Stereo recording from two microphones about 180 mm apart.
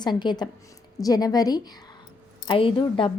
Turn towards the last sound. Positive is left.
turn(degrees=30)  # may be behind; listen again after turning